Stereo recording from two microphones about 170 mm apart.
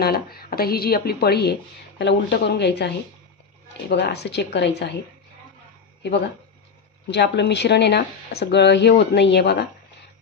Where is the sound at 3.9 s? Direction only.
85° left.